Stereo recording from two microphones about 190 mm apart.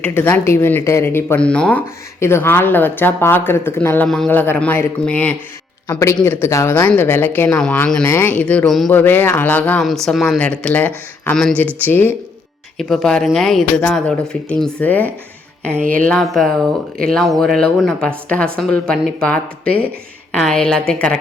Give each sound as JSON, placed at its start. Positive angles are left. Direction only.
{"t": 0.0, "sound": "a woman's voice", "side_deg": 10}